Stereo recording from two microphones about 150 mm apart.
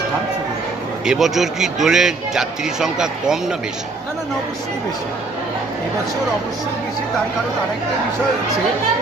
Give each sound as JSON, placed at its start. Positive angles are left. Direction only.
{"t": 1.0, "sound": "a man's voice", "side_deg": -5}